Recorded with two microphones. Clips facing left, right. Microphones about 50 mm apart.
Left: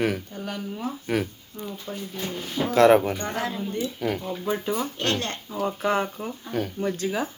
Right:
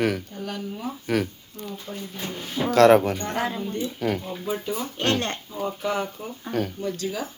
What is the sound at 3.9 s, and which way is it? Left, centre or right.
Speech, centre.